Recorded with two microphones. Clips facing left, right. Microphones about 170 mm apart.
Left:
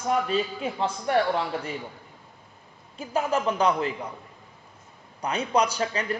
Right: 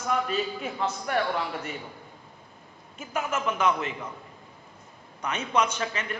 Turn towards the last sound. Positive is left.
turn(degrees=35)  # may be behind; listen again after turning